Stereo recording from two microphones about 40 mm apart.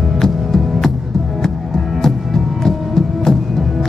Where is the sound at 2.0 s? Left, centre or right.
Centre.